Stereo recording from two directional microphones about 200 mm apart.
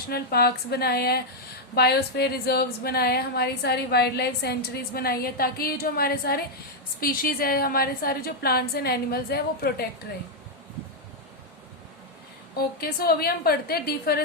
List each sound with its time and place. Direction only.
0.1 s a woman's voice: 50° left (ahead or behind)
12.5 s a woman's voice: 50° left (ahead or behind)